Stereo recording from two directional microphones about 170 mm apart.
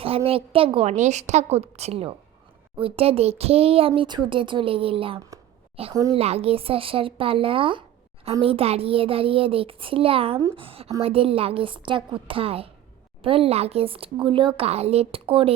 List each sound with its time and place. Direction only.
0.3 s speech: 35° right (ahead or behind)
5.9 s a woman's voice: 20° right (ahead or behind)
6.1 s speech: 35° right (ahead or behind)